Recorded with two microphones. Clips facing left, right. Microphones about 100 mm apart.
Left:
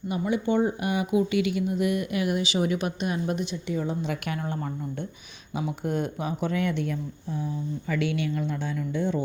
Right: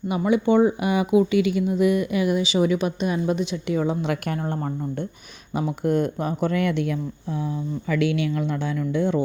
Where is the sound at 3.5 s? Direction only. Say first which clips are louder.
Right 6 dB; 90° right.